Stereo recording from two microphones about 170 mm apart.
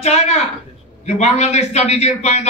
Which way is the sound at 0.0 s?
40° left (ahead or behind).